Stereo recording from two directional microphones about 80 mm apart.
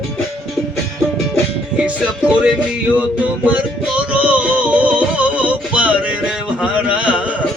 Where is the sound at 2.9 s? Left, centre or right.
Centre.